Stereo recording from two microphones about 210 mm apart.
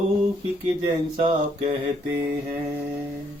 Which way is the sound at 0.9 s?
25° right (ahead or behind).